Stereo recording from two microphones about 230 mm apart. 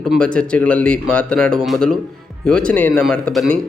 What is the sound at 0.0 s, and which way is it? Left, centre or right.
Speech, centre.